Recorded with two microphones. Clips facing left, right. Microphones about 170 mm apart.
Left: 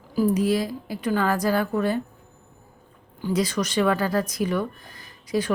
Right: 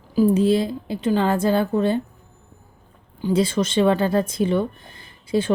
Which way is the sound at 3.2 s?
25° right (ahead or behind).